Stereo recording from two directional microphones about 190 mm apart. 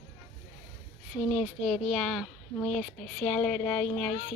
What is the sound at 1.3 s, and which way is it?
Speech, centre (ahead or behind).